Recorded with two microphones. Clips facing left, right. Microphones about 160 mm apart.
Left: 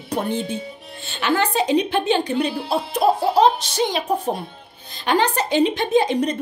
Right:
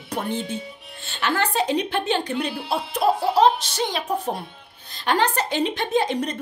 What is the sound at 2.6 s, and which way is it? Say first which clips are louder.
Speech: left 3 dB; 35° left (ahead or behind).